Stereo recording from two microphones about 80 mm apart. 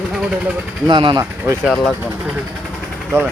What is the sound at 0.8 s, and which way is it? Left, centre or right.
Speech, right.